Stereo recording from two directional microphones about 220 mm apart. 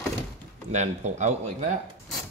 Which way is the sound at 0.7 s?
35° right (ahead or behind).